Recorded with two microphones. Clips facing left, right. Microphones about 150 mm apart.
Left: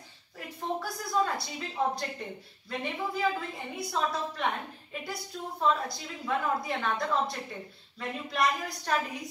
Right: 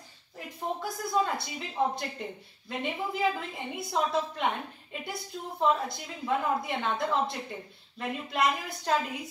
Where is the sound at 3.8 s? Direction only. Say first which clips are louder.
Right 2 dB; 25° right (ahead or behind).